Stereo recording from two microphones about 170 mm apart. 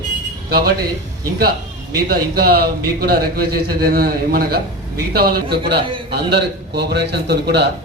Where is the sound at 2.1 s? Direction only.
65° right (ahead or behind).